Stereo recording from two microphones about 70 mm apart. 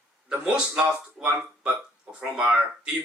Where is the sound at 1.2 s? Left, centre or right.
Centre.